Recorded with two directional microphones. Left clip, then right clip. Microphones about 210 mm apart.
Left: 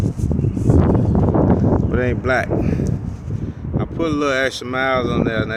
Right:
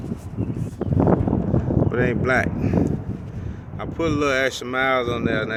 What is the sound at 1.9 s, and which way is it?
Speech, 10° left (ahead or behind).